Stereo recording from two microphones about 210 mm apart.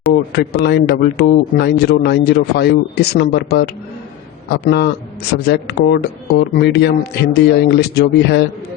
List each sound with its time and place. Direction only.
0.3 s a man's voice: 50° left (ahead or behind)